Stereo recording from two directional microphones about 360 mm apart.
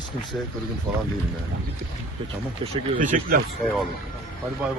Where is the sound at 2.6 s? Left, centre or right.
Centre.